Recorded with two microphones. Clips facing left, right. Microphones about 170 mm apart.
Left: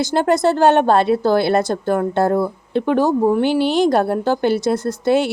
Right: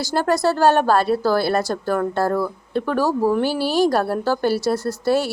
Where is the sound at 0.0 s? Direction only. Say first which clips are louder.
Left 3 dB; 20° left (ahead or behind).